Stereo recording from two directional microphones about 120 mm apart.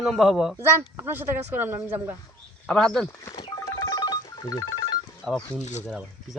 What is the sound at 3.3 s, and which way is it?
Telephone, 40° left (ahead or behind).